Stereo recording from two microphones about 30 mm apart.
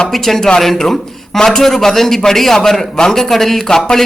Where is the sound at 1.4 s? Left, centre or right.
Centre.